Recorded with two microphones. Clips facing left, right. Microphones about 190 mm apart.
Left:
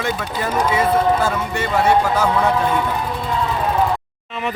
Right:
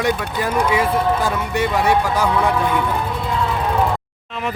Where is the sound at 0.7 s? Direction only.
10° right (ahead or behind).